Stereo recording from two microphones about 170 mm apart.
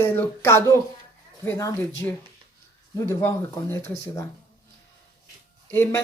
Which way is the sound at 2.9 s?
15° left (ahead or behind).